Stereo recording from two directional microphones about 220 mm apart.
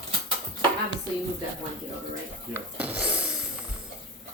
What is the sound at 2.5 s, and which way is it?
Wood, 10° right (ahead or behind).